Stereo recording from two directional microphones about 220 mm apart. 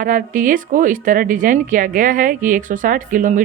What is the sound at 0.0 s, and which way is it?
A woman's voice, 40° right (ahead or behind).